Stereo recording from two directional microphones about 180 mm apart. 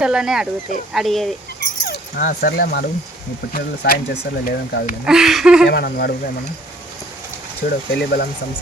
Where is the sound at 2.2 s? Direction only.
55° left (ahead or behind).